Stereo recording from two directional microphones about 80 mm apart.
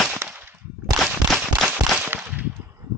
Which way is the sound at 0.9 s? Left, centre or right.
Centre.